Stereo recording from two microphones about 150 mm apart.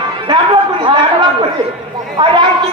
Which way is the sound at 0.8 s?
30° right (ahead or behind).